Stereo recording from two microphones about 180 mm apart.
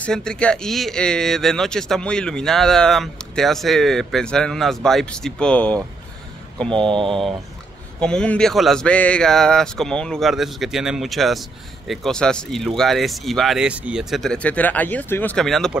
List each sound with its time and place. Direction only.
0.0 s speech: 5° left (ahead or behind)
6.8 s mantra: 30° right (ahead or behind)
7.1 s speech: centre (ahead or behind)